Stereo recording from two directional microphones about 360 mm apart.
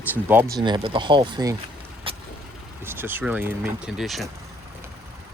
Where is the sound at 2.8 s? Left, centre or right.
Centre.